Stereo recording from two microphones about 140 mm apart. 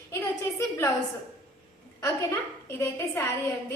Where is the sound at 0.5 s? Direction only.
20° left (ahead or behind).